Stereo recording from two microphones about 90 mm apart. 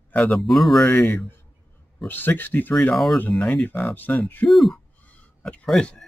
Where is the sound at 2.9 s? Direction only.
Centre (ahead or behind).